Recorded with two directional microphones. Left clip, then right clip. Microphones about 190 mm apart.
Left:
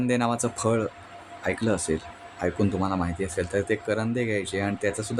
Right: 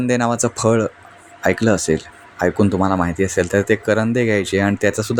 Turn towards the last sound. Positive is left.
turn(degrees=-35)  # may be behind; listen again after turning